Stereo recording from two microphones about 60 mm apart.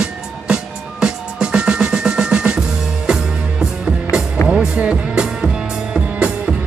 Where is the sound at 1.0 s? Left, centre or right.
Centre.